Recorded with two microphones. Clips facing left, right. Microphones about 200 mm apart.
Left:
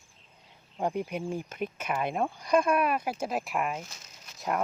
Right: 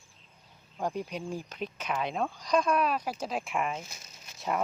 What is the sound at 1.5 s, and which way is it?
Speech, 50° left (ahead or behind).